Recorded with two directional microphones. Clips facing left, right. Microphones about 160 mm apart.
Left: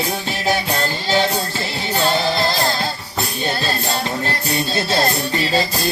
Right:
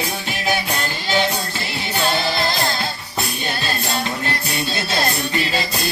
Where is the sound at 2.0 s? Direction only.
30° left (ahead or behind).